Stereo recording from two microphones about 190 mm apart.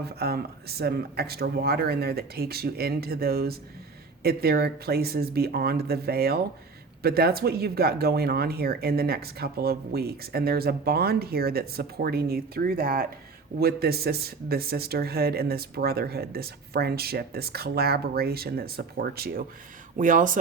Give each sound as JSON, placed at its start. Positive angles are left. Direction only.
{"t": 0.0, "sound": "speech", "side_deg": -55}